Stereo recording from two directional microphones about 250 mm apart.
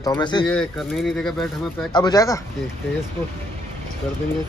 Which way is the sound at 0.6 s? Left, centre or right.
Centre.